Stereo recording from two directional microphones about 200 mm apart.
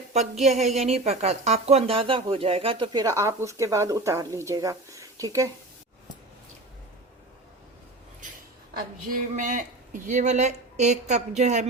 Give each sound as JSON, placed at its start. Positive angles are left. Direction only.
{"t": 0.1, "sound": "a woman's voice", "side_deg": -35}
{"t": 9.3, "sound": "a woman's voice", "side_deg": -40}